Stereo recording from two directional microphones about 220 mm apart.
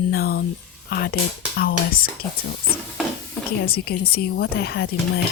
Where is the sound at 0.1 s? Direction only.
45° left (ahead or behind).